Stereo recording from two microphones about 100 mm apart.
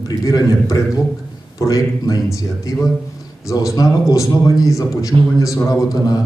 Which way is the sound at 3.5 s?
35° left (ahead or behind).